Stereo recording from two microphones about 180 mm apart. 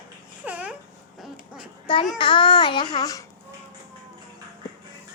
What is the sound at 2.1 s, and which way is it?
A child's voice, 25° left (ahead or behind).